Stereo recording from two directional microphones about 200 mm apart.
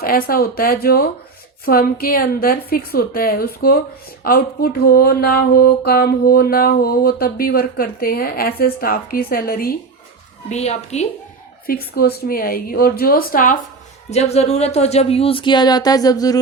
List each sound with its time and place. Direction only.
0.0 s mantra: 45° left (ahead or behind)
10.5 s a woman's voice: 35° left (ahead or behind)
11.6 s mantra: 50° left (ahead or behind)
14.1 s speech: 35° left (ahead or behind)